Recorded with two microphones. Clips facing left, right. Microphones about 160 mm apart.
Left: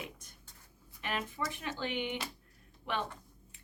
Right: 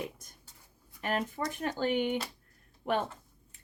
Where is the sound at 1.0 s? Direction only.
45° right (ahead or behind).